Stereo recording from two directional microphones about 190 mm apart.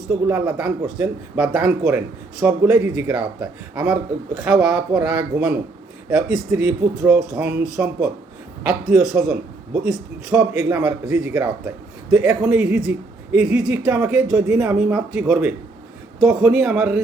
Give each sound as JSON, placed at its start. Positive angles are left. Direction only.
{"t": 0.3, "sound": "speech", "side_deg": -10}